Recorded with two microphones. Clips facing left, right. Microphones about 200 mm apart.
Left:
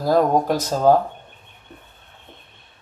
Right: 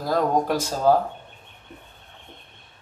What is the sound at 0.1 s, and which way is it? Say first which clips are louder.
Speech: left 4 dB; 40° left (ahead or behind).